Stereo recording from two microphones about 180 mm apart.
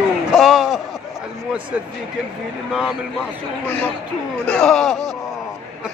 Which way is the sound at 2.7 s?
Centre (ahead or behind).